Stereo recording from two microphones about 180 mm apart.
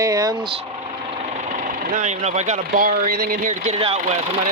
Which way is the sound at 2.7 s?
55° right (ahead or behind).